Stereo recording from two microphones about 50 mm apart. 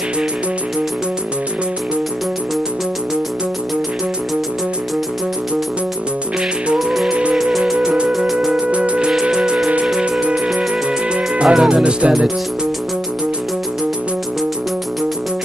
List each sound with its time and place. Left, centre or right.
6.8 s music: centre
7.1 s music: right
8.3 s music: centre
8.5 s music: right
11.4 s speech: centre